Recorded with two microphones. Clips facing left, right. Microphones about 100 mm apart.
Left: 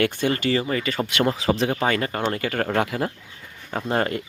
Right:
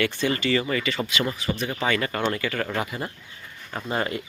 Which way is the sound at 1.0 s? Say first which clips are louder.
Left 6 dB; 60° left (ahead or behind).